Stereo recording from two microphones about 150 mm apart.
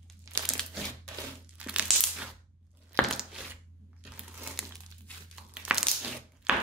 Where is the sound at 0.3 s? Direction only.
20° right (ahead or behind).